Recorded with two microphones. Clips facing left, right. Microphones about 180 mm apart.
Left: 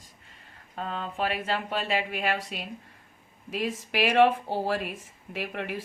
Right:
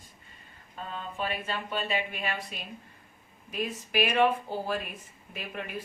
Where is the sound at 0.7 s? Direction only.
75° left (ahead or behind).